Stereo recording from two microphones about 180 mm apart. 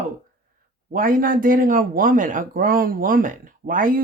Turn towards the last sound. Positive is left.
turn(degrees=-50)  # may be behind; listen again after turning